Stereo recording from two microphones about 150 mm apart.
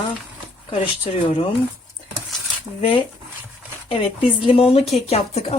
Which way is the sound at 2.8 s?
35° left (ahead or behind).